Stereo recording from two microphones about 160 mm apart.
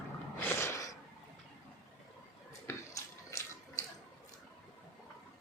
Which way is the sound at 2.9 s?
20° left (ahead or behind).